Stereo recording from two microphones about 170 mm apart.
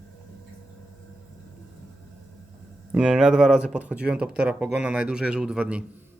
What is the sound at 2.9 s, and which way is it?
Speech, 5° right (ahead or behind).